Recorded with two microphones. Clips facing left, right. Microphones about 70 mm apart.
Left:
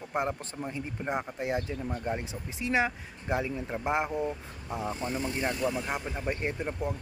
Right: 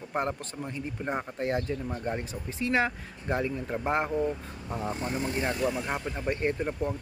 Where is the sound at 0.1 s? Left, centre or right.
Centre.